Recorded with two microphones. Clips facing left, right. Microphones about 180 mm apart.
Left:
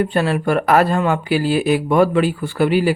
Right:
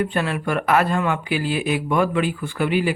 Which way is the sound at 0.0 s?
35° left (ahead or behind).